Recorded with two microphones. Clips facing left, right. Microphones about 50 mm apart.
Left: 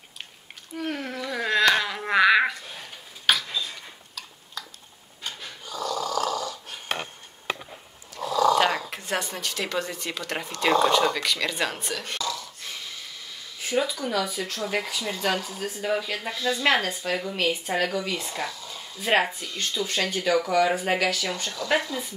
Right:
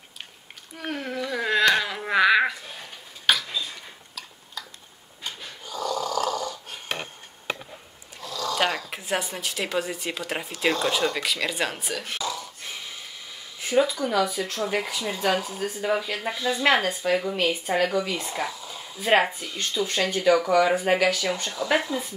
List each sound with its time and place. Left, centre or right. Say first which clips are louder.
0.7 s a sound: even; centre
5.2 s snoring: even; centre
8.2 s dog: left 9 dB; centre
8.9 s speech: right 1 dB; centre
12.2 s a sound: even; centre
13.7 s speech: right 4 dB; centre